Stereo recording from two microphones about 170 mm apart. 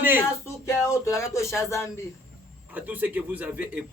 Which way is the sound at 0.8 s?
15° left (ahead or behind).